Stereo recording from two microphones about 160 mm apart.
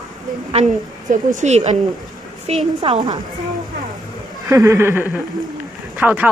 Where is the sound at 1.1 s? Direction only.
50° right (ahead or behind).